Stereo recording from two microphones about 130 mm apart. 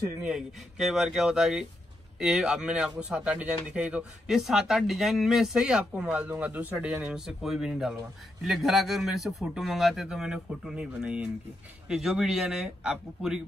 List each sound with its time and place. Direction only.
0.2 s a man's voice: 5° right (ahead or behind)